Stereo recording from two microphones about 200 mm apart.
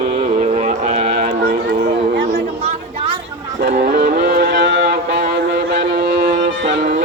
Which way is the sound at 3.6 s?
45° right (ahead or behind).